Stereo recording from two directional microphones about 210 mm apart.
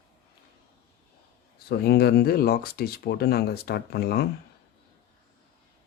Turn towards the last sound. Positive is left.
turn(degrees=50)  # may be behind; listen again after turning